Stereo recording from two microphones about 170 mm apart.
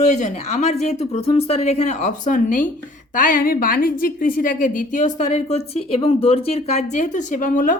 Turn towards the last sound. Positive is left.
turn(degrees=50)  # may be behind; listen again after turning